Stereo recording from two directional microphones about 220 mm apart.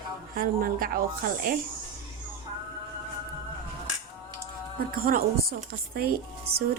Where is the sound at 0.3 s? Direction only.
40° right (ahead or behind).